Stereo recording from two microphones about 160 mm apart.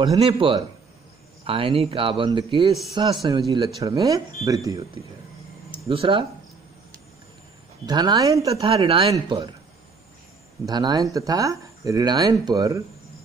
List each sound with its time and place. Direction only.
0.2 s speech: 35° right (ahead or behind)
5.9 s speech: 35° right (ahead or behind)
7.8 s speech: 25° right (ahead or behind)
8.5 s speech: 35° right (ahead or behind)
10.6 s speech: 25° right (ahead or behind)